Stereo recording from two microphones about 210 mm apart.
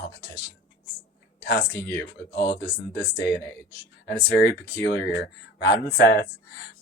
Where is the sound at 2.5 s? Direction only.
55° left (ahead or behind).